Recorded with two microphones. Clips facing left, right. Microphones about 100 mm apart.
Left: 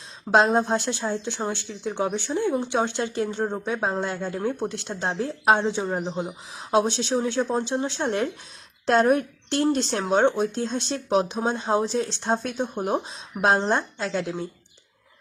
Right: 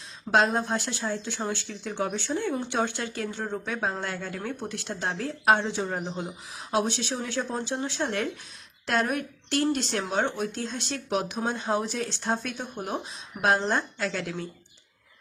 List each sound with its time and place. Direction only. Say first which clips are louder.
0.3 s a woman's voice: left 4 dB; 25° left (ahead or behind)